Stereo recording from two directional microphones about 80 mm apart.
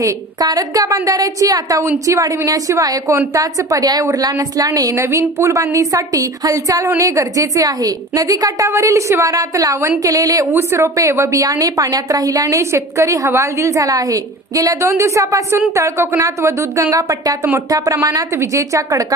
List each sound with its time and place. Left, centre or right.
0.0 s a woman's voice: right
10.4 s speech: right
11.4 s a woman's voice: right